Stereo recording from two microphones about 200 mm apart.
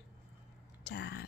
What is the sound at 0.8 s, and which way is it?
Speech, 55° left (ahead or behind).